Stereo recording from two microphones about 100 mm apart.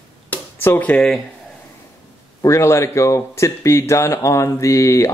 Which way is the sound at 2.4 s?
30° left (ahead or behind).